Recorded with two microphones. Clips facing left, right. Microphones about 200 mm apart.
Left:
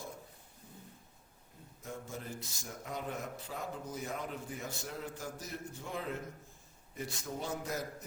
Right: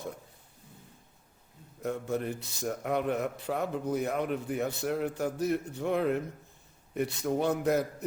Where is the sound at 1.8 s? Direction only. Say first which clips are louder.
Right 12 dB; 65° right (ahead or behind).